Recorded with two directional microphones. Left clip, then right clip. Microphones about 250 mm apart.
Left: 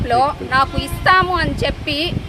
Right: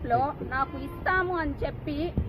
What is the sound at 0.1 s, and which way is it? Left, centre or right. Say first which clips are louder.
Speech: left 11 dB; left.